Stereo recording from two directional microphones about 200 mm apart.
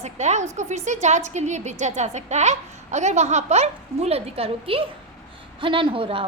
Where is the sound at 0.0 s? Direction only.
35° right (ahead or behind).